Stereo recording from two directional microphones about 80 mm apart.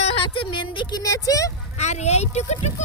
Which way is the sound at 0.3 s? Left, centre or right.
Left.